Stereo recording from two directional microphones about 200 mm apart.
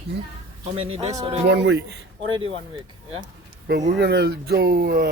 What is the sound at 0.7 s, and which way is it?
Speech, 30° right (ahead or behind).